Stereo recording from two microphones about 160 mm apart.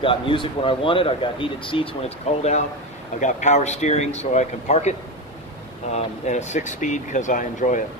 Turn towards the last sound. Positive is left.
turn(degrees=50)  # may be behind; listen again after turning